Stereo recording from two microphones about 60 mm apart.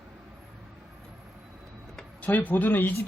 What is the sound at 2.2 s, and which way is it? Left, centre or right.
Speech, left.